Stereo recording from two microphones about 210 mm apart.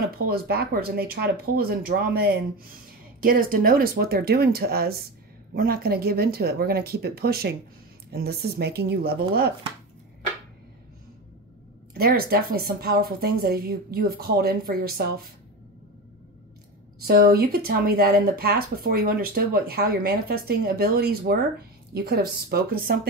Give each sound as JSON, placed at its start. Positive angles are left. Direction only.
{"t": 0.3, "sound": "speech", "side_deg": -45}
{"t": 11.9, "sound": "speech", "side_deg": -45}
{"t": 17.0, "sound": "speech", "side_deg": -45}